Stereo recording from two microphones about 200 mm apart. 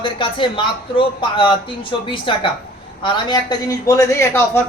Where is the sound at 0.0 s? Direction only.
25° left (ahead or behind).